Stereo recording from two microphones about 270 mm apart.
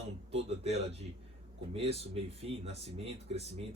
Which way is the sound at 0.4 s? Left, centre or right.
Right.